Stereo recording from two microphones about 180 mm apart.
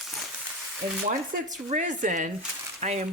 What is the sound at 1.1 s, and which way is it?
Speech, 45° right (ahead or behind).